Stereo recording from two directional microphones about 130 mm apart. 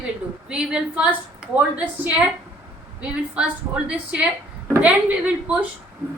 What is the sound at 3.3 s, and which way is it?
A woman's voice, 10° right (ahead or behind).